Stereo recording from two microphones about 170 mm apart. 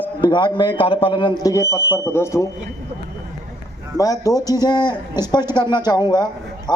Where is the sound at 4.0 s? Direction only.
20° left (ahead or behind).